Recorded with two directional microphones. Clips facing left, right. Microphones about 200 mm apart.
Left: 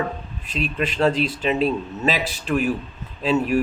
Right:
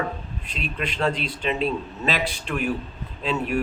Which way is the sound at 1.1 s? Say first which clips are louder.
Left 6 dB; 45° left (ahead or behind).